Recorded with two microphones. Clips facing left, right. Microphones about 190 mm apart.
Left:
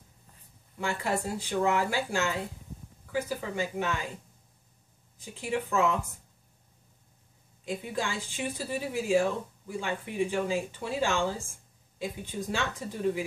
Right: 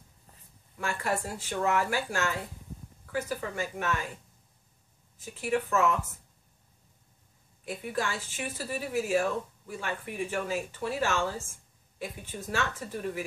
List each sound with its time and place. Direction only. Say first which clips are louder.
0.7 s a woman's voice: left 1 dB; 15° left (ahead or behind)
5.2 s a woman's voice: right 2 dB; 15° left (ahead or behind)
7.6 s a woman's voice: even; 15° left (ahead or behind)